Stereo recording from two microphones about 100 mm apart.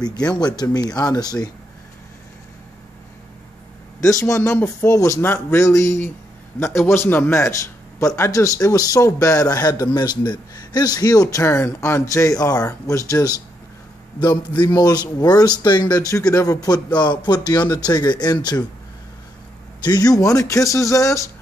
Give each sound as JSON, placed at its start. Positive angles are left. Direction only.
{"t": 0.3, "sound": "a man's voice", "side_deg": 45}
{"t": 4.0, "sound": "a man's voice", "side_deg": 35}
{"t": 4.4, "sound": "speech", "side_deg": 20}
{"t": 4.8, "sound": "a man's voice", "side_deg": 30}
{"t": 19.8, "sound": "a man's voice", "side_deg": 40}